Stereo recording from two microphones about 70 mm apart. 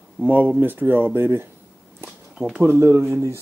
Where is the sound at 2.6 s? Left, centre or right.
Right.